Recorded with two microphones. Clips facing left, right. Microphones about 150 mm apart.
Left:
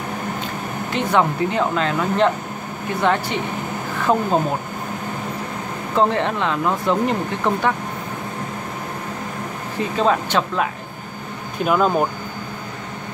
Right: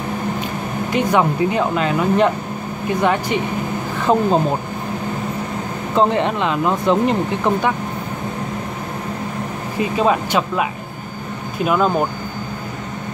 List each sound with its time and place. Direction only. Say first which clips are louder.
0.9 s speech: right 2 dB; 10° right (ahead or behind)
5.9 s speech: right 2 dB; 20° right (ahead or behind)
9.8 s speech: right 2 dB; 10° right (ahead or behind)